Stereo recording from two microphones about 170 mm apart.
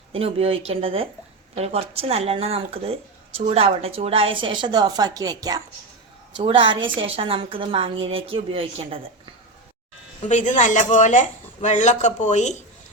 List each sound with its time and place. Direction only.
0.1 s a woman's voice: 35° right (ahead or behind)
10.2 s speech: 45° left (ahead or behind)